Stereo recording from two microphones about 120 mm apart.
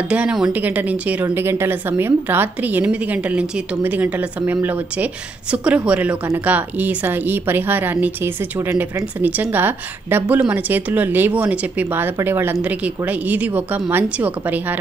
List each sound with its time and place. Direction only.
0.1 s a woman's voice: 5° right (ahead or behind)